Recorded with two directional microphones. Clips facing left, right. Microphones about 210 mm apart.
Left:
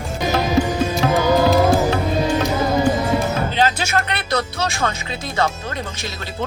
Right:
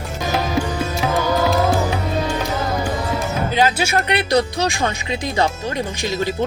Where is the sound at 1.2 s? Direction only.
10° left (ahead or behind).